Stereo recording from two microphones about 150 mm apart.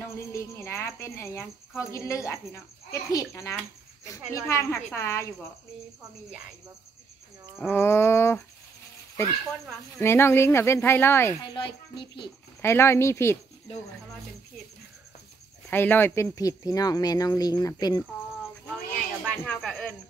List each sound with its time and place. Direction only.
0.0 s cricket: 20° left (ahead or behind)
1.8 s speech: 20° left (ahead or behind)
7.7 s speech: 15° left (ahead or behind)
9.9 s speech: 15° left (ahead or behind)
11.5 s speech: 35° left (ahead or behind)
12.6 s speech: 15° left (ahead or behind)
15.7 s speech: 15° left (ahead or behind)
18.9 s a sound: 10° left (ahead or behind)